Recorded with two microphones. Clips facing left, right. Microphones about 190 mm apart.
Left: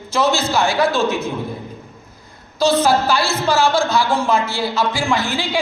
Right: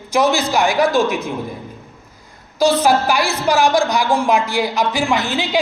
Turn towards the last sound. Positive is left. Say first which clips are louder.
# right 2 dB
turn(degrees=-20)  # may be behind; listen again after turning